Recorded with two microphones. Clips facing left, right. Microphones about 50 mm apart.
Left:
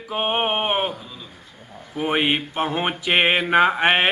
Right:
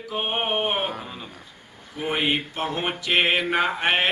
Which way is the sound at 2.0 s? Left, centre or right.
Left.